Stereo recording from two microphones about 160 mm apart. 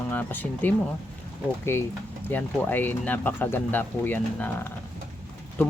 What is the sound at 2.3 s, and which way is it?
Speech, 10° left (ahead or behind).